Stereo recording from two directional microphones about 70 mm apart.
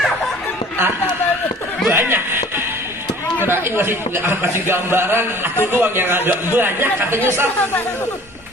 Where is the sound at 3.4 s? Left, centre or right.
Right.